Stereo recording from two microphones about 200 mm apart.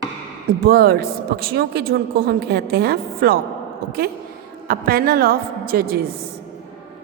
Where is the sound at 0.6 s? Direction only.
50° right (ahead or behind).